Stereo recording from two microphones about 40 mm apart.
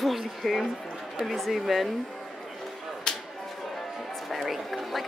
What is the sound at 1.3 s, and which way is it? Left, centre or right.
Speech, centre.